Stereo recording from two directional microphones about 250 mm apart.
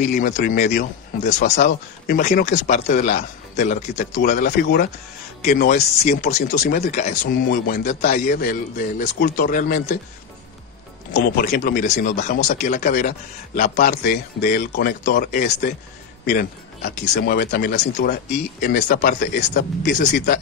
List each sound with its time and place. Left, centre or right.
0.0 s speech: left
11.1 s speech: left